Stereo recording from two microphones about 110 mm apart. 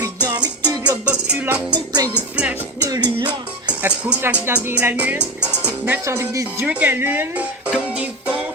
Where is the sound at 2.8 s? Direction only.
40° right (ahead or behind).